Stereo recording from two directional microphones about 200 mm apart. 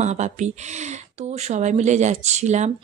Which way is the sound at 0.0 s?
35° right (ahead or behind).